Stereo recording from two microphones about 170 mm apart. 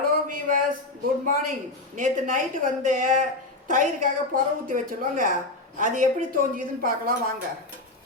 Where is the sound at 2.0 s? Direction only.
50° right (ahead or behind).